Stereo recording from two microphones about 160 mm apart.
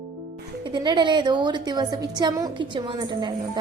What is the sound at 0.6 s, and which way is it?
A woman's voice, 30° right (ahead or behind).